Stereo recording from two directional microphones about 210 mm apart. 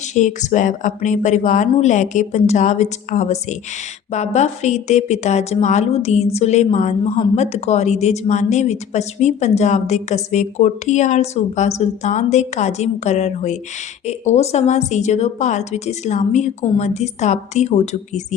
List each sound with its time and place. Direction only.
0.1 s a woman's voice: 35° left (ahead or behind)